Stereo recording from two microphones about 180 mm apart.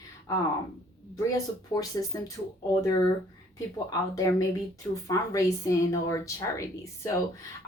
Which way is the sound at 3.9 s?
20° left (ahead or behind).